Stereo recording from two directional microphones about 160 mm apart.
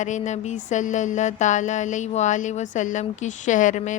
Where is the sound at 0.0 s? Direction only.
50° left (ahead or behind).